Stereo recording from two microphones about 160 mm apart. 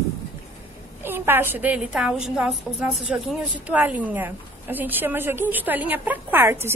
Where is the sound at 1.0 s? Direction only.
15° right (ahead or behind).